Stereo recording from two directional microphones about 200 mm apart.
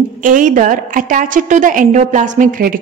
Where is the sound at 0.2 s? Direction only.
40° right (ahead or behind).